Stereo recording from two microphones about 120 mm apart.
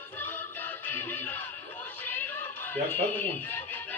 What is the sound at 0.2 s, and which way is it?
Music, 15° left (ahead or behind).